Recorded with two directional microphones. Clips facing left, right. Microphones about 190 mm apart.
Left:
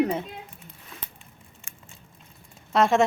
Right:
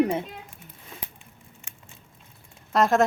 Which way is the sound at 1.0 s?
10° right (ahead or behind).